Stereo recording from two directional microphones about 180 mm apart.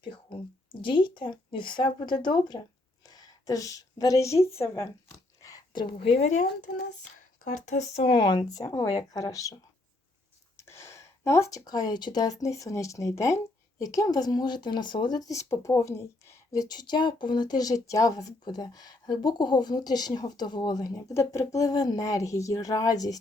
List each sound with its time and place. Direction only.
0.0 s speech: 30° left (ahead or behind)
3.1 s a sound: 20° left (ahead or behind)
4.5 s speech: 15° left (ahead or behind)
5.4 s whispering: 20° left (ahead or behind)
6.1 s speech: 40° left (ahead or behind)
7.6 s speech: 40° left (ahead or behind); by 9.6 s 20° left (ahead or behind)
10.6 s speech: 15° left (ahead or behind)